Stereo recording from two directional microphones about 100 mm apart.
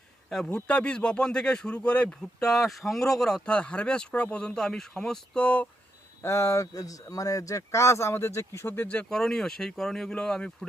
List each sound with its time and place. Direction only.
0.3 s speech: 5° left (ahead or behind)
6.2 s speech: 30° left (ahead or behind)
9.0 s speech: 5° left (ahead or behind)